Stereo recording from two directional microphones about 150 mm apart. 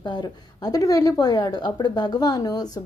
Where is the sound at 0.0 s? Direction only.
30° left (ahead or behind).